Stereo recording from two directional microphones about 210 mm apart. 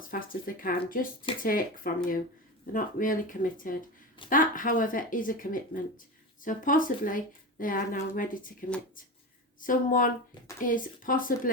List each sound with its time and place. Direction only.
0.0 s speech: 40° left (ahead or behind)